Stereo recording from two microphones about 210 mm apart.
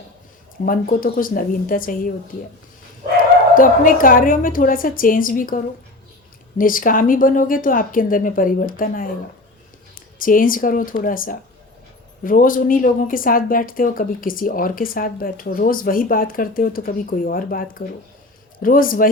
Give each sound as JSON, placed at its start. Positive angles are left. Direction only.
{"t": 0.6, "sound": "a woman's voice", "side_deg": 40}
{"t": 3.5, "sound": "a woman's voice", "side_deg": 40}
{"t": 6.6, "sound": "a woman's voice", "side_deg": 40}
{"t": 10.2, "sound": "a woman's voice", "side_deg": 40}